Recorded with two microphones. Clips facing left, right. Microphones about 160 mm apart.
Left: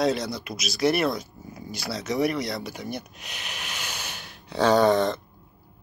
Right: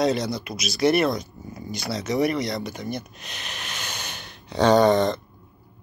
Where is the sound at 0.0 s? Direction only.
Centre (ahead or behind).